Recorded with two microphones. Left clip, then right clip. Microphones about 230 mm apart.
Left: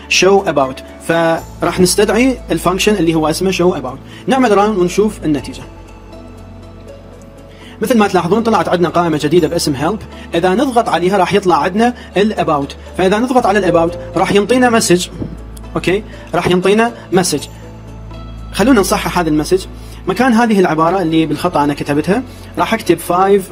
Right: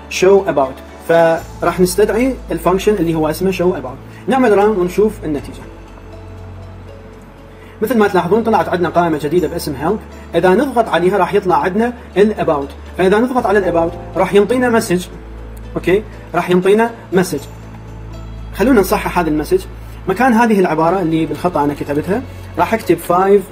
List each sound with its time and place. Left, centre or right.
0.3 s speech: left
7.8 s speech: left
18.5 s speech: left